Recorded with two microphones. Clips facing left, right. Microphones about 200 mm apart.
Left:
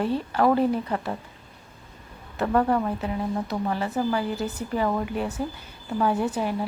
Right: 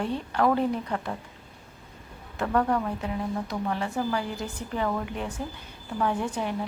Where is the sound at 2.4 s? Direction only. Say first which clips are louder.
Left 3 dB; 25° left (ahead or behind).